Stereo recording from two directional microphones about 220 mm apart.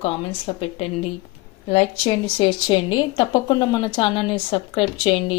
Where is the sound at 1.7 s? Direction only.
25° left (ahead or behind).